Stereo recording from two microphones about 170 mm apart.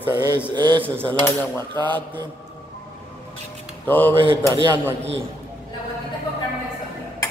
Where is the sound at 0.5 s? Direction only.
25° right (ahead or behind).